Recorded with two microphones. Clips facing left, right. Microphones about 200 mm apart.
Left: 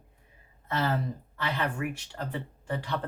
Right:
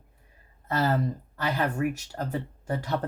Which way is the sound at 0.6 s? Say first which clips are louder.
Right 3 dB; 45° right (ahead or behind).